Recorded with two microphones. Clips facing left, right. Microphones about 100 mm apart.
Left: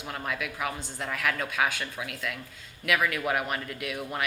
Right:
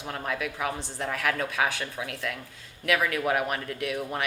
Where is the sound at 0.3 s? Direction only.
35° right (ahead or behind).